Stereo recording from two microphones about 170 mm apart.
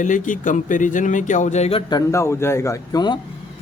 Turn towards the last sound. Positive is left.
turn(degrees=25)  # may be behind; listen again after turning